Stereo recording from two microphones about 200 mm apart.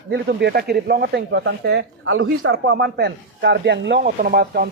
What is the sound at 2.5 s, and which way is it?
Speech, 50° right (ahead or behind).